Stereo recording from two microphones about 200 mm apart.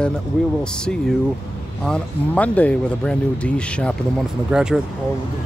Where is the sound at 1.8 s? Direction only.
5° left (ahead or behind).